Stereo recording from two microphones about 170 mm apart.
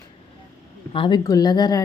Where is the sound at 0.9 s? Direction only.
30° left (ahead or behind).